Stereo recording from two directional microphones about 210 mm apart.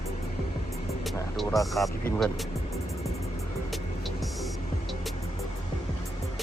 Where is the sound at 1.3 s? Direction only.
Centre (ahead or behind).